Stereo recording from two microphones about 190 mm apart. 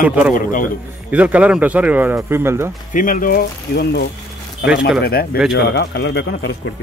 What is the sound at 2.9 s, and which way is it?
Speech, 45° left (ahead or behind).